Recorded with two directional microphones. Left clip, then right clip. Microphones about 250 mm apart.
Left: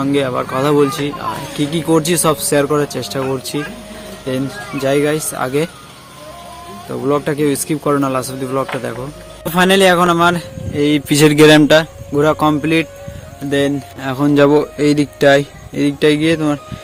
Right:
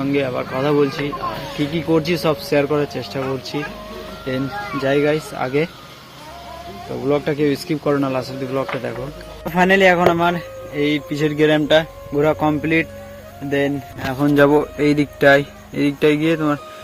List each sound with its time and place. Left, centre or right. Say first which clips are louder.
0.0 s speech: left 4 dB; centre
4.7 s speech: left 2 dB; centre
7.0 s speech: left 3 dB; centre
11.1 s a man's voice: left 10 dB; left
12.1 s speech: left 4 dB; centre